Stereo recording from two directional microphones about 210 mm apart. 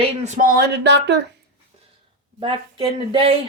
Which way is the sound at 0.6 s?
50° right (ahead or behind).